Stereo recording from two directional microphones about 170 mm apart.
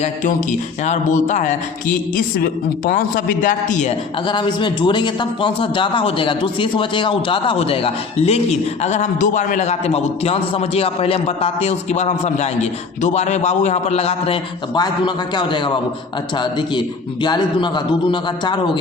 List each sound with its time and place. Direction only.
0.0 s a man's voice: 45° left (ahead or behind)
4.3 s a man's voice: 25° left (ahead or behind)